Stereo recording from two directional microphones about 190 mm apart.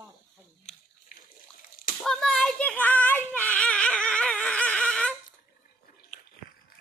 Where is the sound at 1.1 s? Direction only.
50° left (ahead or behind).